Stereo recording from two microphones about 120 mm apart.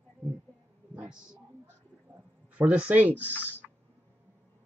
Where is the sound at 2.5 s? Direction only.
10° right (ahead or behind).